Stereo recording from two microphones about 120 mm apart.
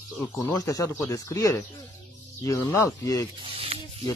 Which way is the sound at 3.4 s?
55° right (ahead or behind).